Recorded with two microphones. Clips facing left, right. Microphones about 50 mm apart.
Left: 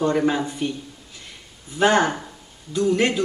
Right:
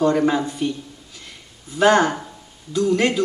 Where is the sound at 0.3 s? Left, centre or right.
Left.